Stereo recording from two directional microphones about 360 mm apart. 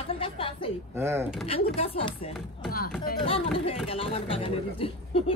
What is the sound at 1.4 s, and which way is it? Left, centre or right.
Speech, centre.